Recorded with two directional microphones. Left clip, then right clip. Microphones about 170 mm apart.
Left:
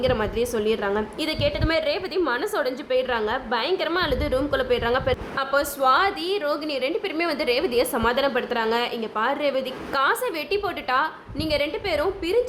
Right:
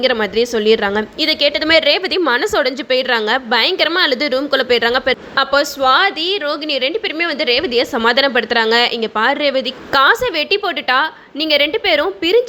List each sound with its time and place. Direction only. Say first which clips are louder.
0.0 s a woman's voice: right 8 dB; 20° right (ahead or behind)
5.3 s a woman's voice: right 9 dB; 30° right (ahead or behind)
9.9 s a woman's voice: right 10 dB; 30° right (ahead or behind)